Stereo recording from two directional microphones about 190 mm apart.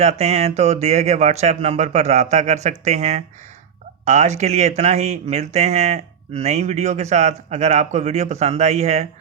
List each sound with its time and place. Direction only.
0.0 s speech: 35° right (ahead or behind)